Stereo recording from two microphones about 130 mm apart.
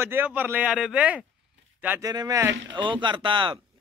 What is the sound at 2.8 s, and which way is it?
Speech, 40° right (ahead or behind).